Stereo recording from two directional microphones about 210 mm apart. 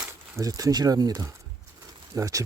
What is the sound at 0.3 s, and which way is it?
Speech, 15° right (ahead or behind).